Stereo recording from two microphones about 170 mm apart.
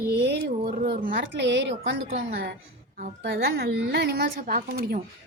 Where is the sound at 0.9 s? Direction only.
60° right (ahead or behind); by 2.0 s 90° right.